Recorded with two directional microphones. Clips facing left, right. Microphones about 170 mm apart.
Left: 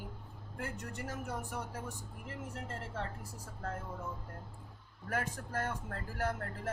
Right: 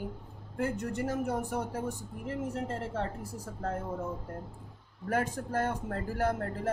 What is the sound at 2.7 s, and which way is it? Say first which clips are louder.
Speech: right 7 dB; 30° right (ahead or behind).